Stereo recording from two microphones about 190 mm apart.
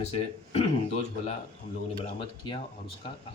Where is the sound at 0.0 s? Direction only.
35° left (ahead or behind).